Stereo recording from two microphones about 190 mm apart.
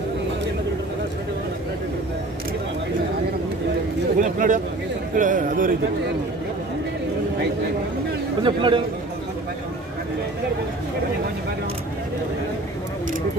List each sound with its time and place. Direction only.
4.2 s a man's voice: 45° right (ahead or behind)
8.4 s a man's voice: 25° right (ahead or behind)